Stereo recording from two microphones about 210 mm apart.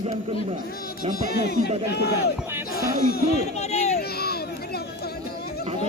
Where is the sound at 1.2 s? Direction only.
50° left (ahead or behind).